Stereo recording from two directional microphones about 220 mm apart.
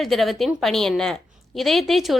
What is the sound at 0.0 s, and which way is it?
A woman's voice, centre (ahead or behind).